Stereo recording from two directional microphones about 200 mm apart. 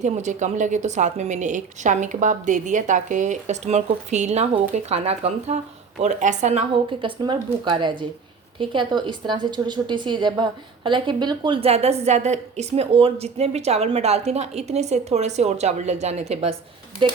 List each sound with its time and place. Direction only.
0.0 s a woman's voice: 35° right (ahead or behind)
7.2 s a woman's voice: 25° right (ahead or behind)